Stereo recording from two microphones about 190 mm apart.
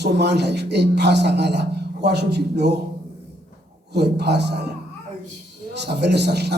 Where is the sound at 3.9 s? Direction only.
60° right (ahead or behind).